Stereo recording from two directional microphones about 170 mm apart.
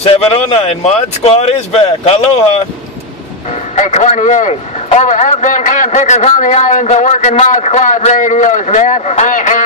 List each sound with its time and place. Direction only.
0.0 s a man's voice: 35° left (ahead or behind)
3.7 s a man's voice: 45° left (ahead or behind)